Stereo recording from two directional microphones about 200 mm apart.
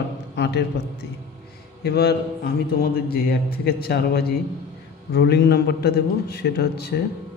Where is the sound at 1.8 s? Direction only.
55° left (ahead or behind).